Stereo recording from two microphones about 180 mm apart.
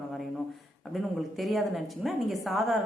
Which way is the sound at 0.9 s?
Centre (ahead or behind).